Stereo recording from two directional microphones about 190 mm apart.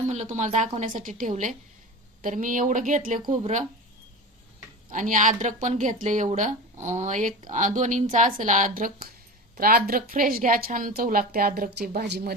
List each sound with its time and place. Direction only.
0.1 s a woman's voice: 40° right (ahead or behind)
4.9 s a woman's voice: 40° right (ahead or behind)